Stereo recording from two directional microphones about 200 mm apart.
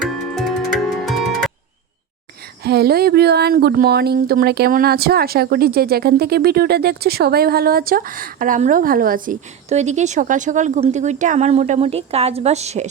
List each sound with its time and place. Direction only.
0.3 s music: centre (ahead or behind)
2.6 s speech: 50° right (ahead or behind); by 12.9 s 35° right (ahead or behind)